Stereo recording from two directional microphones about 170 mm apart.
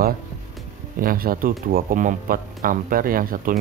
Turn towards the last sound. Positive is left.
turn(degrees=-55)  # may be behind; listen again after turning